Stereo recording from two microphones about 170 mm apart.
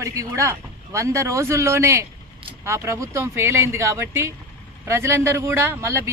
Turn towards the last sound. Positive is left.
turn(degrees=-15)  # may be behind; listen again after turning